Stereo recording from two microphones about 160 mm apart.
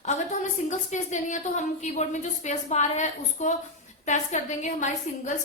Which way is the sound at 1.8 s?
45° left (ahead or behind).